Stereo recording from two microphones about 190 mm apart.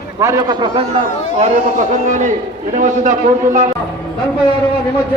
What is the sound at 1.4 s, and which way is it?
A man's voice, 40° right (ahead or behind).